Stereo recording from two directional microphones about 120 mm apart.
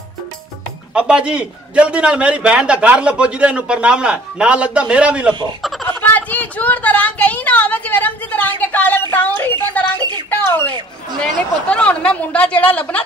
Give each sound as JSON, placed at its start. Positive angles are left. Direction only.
{"t": 0.9, "sound": "a man's voice", "side_deg": -10}
{"t": 5.9, "sound": "a sound", "side_deg": 15}
{"t": 11.7, "sound": "speech", "side_deg": 10}